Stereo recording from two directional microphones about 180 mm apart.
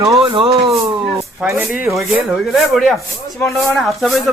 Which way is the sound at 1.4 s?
10° right (ahead or behind).